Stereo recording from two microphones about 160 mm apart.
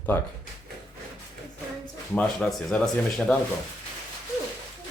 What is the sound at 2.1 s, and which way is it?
Speech, 5° left (ahead or behind).